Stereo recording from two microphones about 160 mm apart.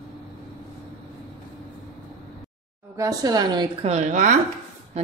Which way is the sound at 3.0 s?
25° right (ahead or behind).